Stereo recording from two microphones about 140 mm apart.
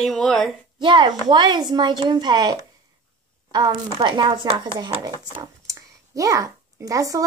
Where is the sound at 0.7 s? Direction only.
35° right (ahead or behind).